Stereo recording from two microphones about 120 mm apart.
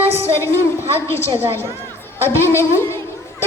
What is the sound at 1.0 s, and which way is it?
A woman's voice, 20° left (ahead or behind).